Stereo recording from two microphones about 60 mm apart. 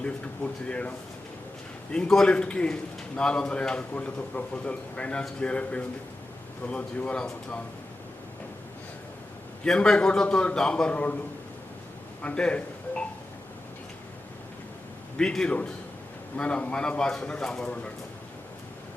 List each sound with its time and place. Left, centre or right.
0.0 s a man's voice: centre
2.2 s a man's voice: centre
9.6 s a man's voice: centre
12.2 s speech: centre
15.2 s a man's voice: centre
16.4 s a man's voice: left